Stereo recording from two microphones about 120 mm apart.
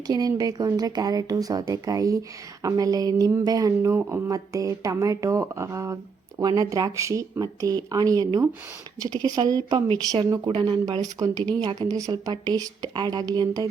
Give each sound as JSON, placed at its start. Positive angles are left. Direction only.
{"t": 0.1, "sound": "speech", "side_deg": -30}